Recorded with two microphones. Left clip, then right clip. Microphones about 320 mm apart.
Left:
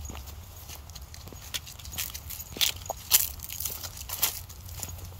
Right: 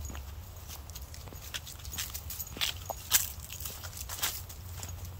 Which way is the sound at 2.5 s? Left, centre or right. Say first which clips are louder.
Left 6 dB; left.